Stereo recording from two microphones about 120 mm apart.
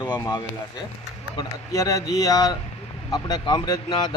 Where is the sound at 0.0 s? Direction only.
35° left (ahead or behind).